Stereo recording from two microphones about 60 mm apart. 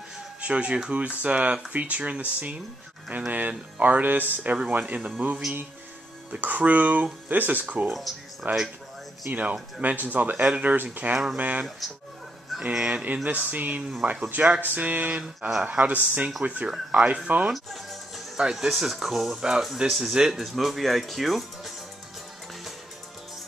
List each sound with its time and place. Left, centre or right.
0.4 s speech: centre
6.3 s speech: right
7.9 s speech: centre
9.3 s speech: right
10.3 s speech: centre
10.6 s speech: right
11.8 s speech: centre
12.7 s speech: centre
13.0 s speech: right
16.7 s speech: centre
17.5 s music: centre
18.4 s speech: centre